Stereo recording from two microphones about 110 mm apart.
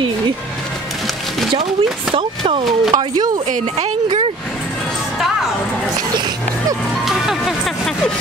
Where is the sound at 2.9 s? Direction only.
35° right (ahead or behind).